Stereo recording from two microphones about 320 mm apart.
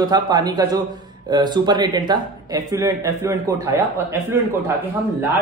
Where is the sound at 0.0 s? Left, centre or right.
Centre.